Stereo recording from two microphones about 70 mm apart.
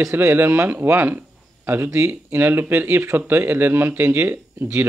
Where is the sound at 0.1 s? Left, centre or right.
Right.